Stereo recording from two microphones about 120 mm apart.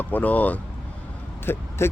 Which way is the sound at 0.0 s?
15° left (ahead or behind).